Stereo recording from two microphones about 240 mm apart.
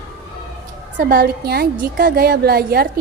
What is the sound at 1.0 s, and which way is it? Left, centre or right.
A woman's voice, right.